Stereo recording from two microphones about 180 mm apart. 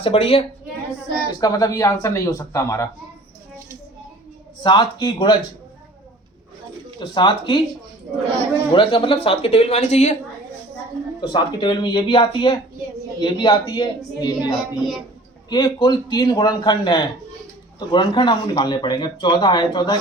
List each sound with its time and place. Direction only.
0.0 s speech: 30° left (ahead or behind)
1.4 s speech: 20° left (ahead or behind)
4.6 s speech: 25° left (ahead or behind)
7.0 s speech: 25° left (ahead or behind)
8.7 s speech: 30° left (ahead or behind)
11.2 s speech: 25° left (ahead or behind)
14.5 s speech: centre (ahead or behind)
15.4 s speech: 25° left (ahead or behind)